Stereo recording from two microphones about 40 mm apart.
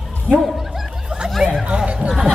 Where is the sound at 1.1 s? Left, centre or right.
Right.